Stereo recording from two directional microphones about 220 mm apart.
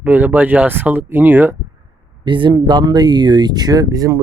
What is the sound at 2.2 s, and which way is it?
Speech, 20° right (ahead or behind).